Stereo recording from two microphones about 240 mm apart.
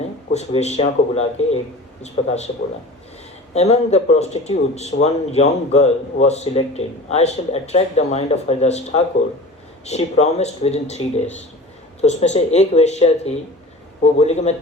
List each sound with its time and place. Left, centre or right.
0.3 s a man's voice: left
3.5 s a man's voice: left